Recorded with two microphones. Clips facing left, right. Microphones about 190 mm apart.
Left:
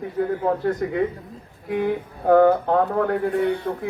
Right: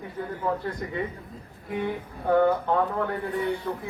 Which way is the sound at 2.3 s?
60° left (ahead or behind).